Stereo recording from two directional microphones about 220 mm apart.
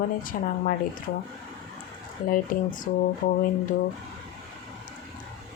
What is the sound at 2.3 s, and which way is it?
Speech, 40° left (ahead or behind).